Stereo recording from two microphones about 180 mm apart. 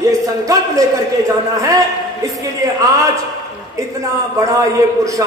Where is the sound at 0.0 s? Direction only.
20° right (ahead or behind).